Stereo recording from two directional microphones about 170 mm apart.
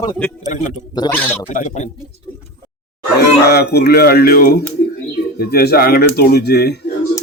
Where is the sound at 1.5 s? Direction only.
45° left (ahead or behind).